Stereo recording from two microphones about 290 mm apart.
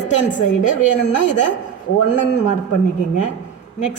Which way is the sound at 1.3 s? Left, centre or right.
Left.